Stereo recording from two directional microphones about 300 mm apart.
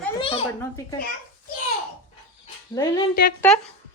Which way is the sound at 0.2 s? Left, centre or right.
Centre.